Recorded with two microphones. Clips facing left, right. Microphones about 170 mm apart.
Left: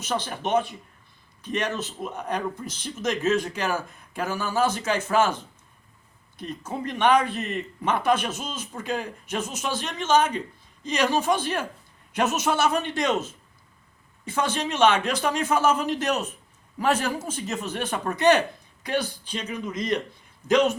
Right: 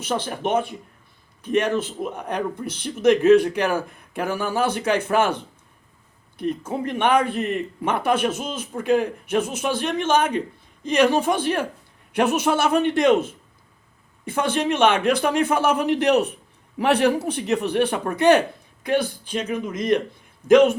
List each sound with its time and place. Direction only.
0.0 s a man's voice: 55° right (ahead or behind)